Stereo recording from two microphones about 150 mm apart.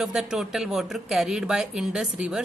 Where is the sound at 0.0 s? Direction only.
5° right (ahead or behind).